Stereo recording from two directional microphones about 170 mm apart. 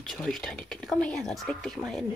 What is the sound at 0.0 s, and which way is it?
Speech, centre (ahead or behind).